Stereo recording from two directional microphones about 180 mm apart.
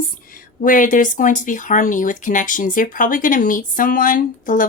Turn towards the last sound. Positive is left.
turn(degrees=50)  # may be behind; listen again after turning